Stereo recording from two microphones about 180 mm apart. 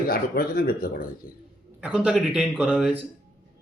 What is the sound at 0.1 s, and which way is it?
A man's voice, 55° left (ahead or behind).